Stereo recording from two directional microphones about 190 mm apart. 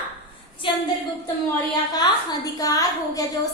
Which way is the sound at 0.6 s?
25° left (ahead or behind).